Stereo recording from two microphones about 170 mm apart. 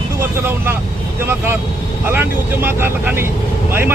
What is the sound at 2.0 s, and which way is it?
Speech, 15° right (ahead or behind).